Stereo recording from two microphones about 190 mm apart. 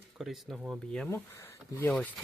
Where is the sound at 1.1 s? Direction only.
15° left (ahead or behind).